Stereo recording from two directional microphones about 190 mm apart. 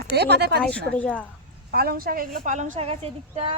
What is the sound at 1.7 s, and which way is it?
A woman's voice, 50° right (ahead or behind).